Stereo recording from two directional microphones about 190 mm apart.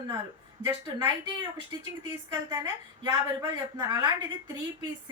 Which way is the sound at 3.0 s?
20° right (ahead or behind).